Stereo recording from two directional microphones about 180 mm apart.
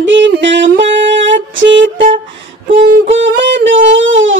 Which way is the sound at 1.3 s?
90° right.